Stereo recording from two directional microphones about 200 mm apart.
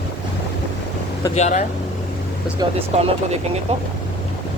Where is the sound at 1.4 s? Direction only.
35° left (ahead or behind).